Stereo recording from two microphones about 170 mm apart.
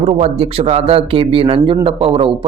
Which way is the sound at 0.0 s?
35° right (ahead or behind).